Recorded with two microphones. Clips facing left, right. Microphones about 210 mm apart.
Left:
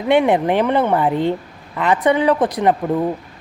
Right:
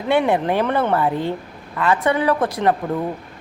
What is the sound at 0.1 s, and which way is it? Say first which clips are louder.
Speech: left 3 dB; 20° left (ahead or behind).